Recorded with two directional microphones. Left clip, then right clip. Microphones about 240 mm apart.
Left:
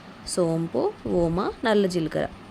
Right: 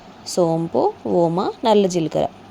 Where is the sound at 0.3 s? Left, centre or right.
Centre.